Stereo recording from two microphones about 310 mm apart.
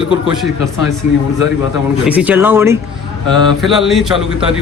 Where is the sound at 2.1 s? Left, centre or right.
Centre.